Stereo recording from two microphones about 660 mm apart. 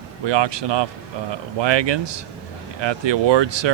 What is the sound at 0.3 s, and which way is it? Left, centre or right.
Speech, right.